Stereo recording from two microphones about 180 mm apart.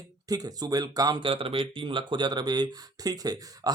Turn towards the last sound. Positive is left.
turn(degrees=-20)  # may be behind; listen again after turning